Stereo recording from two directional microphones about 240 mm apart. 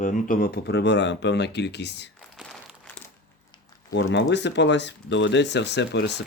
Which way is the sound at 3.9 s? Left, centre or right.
Left.